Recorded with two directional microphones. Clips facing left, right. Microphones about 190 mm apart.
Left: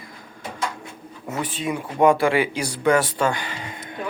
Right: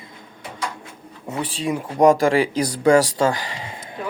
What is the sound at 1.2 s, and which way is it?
Speech, 25° right (ahead or behind).